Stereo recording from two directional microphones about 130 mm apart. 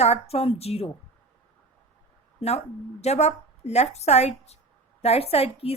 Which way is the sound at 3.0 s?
55° left (ahead or behind).